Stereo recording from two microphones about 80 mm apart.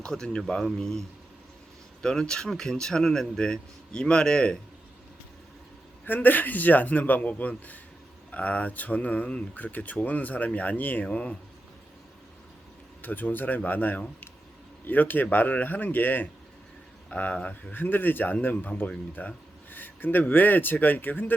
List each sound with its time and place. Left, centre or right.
0.0 s speech: centre
6.1 s speech: left
13.0 s speech: left